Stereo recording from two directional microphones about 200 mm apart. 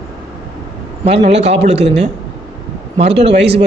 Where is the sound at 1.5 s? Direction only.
35° right (ahead or behind).